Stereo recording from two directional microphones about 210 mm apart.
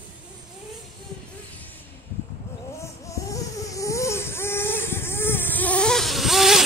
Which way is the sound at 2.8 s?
15° left (ahead or behind).